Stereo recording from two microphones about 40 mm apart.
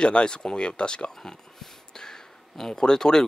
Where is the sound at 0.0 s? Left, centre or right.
Left.